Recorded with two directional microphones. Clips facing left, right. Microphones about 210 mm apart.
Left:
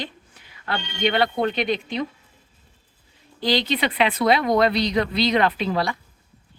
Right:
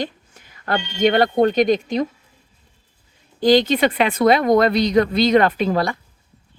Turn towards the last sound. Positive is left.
turn(degrees=-45)  # may be behind; listen again after turning